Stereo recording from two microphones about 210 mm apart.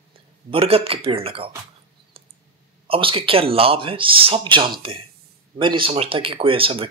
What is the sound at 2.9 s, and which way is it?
Speech, 25° right (ahead or behind).